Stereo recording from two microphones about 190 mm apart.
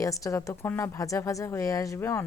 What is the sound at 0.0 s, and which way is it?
Speech, 15° left (ahead or behind).